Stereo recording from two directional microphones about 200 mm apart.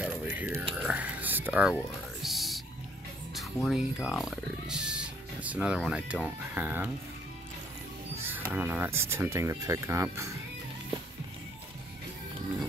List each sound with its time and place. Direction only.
0.0 s whispering: 10° right (ahead or behind)
2.2 s music: centre (ahead or behind)
3.6 s speech: centre (ahead or behind)
8.2 s speech: 10° right (ahead or behind)